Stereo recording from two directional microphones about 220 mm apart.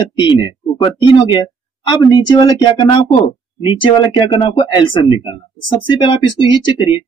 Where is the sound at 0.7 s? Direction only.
20° left (ahead or behind).